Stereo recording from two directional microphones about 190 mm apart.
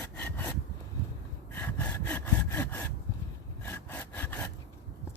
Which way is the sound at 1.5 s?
10° left (ahead or behind).